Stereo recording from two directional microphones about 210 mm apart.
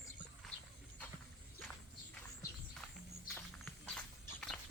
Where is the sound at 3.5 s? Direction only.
Centre (ahead or behind).